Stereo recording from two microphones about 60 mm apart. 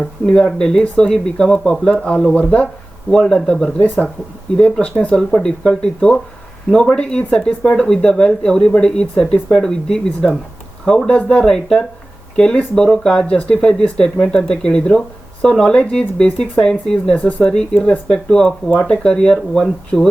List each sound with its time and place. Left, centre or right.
0.0 s speech: centre
17.2 s speech: left
17.4 s speech: centre